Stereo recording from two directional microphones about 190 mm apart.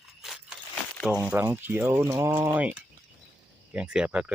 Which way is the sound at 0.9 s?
5° right (ahead or behind).